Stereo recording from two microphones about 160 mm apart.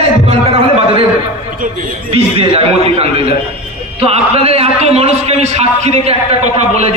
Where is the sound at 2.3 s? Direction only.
35° right (ahead or behind).